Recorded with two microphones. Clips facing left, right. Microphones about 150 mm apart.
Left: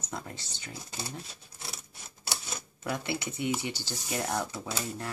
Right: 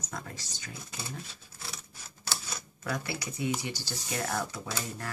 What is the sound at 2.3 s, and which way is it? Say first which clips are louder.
Camera: even; 25° left (ahead or behind).